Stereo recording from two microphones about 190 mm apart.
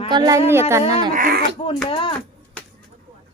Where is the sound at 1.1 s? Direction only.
45° right (ahead or behind).